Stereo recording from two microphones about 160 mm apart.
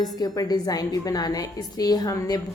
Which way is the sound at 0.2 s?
25° left (ahead or behind).